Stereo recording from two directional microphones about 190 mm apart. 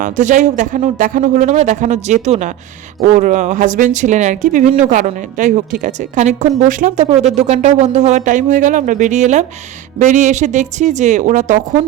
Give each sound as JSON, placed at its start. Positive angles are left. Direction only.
{"t": 0.0, "sound": "speech", "side_deg": -40}